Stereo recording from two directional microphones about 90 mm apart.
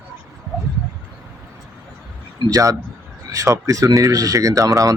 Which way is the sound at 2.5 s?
35° right (ahead or behind).